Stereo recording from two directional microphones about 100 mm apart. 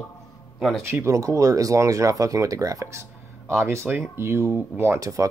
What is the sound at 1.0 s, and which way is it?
Speech, 35° right (ahead or behind).